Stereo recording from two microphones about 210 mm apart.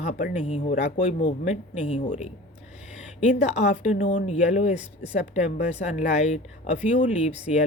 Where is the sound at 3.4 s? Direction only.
35° left (ahead or behind).